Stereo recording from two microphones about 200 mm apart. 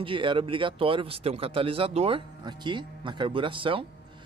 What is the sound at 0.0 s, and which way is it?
Speech, 25° right (ahead or behind).